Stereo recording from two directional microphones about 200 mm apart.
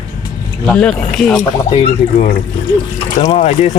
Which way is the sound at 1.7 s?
35° left (ahead or behind).